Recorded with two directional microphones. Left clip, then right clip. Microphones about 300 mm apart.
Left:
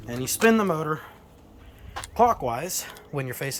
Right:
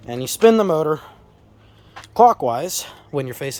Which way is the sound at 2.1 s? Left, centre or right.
Centre.